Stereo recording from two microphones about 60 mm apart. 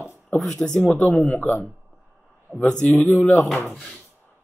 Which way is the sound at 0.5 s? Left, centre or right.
Centre.